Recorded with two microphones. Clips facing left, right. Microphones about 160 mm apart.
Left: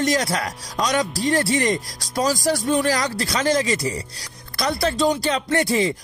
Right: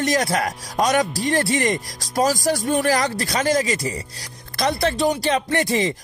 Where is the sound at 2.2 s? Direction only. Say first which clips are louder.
Right 1 dB; 40° right (ahead or behind).